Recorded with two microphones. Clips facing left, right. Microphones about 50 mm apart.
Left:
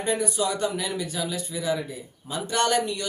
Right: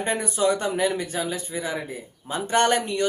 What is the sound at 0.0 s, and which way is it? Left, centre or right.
Speech, right.